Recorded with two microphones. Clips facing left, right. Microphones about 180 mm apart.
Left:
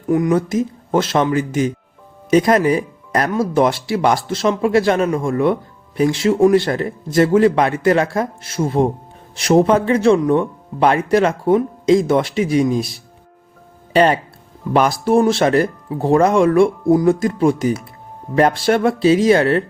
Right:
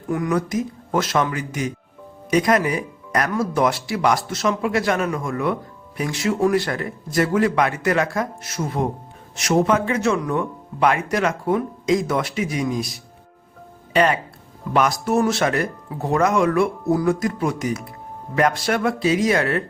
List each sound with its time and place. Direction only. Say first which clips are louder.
0.1 s speech: left 6 dB; 25° left (ahead or behind)